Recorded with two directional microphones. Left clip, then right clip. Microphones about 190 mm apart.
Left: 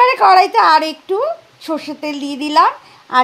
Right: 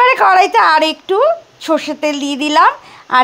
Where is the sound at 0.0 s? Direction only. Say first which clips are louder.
Even; 20° right (ahead or behind).